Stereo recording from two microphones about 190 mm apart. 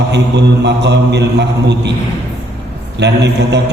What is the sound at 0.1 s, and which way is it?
Mantra, 65° right (ahead or behind).